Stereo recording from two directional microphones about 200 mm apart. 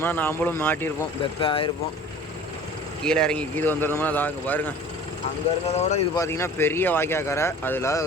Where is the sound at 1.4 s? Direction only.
25° left (ahead or behind).